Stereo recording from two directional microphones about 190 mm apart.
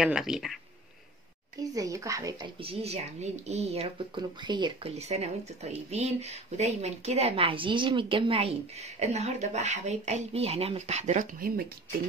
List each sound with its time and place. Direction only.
0.0 s speech: 5° right (ahead or behind)
1.6 s speech: 15° right (ahead or behind)
2.6 s speech: 30° right (ahead or behind); by 11.6 s 50° right (ahead or behind)